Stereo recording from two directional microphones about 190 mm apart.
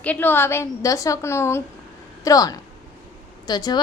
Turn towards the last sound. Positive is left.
turn(degrees=20)  # may be behind; listen again after turning